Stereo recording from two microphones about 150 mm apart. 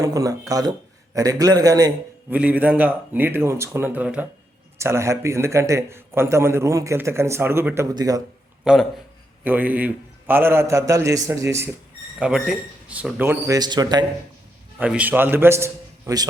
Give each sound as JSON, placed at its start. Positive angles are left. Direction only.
{"t": 0.0, "sound": "a man's voice", "side_deg": -25}
{"t": 2.3, "sound": "a man's voice", "side_deg": -10}
{"t": 8.6, "sound": "speech", "side_deg": 0}
{"t": 9.4, "sound": "a man's voice", "side_deg": -10}
{"t": 12.2, "sound": "a man's voice", "side_deg": -5}
{"t": 13.5, "sound": "a man's voice", "side_deg": -25}
{"t": 14.8, "sound": "a man's voice", "side_deg": -10}